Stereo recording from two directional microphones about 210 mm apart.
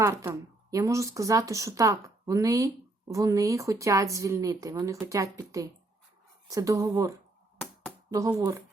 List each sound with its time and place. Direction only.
0.0 s speech: 15° right (ahead or behind)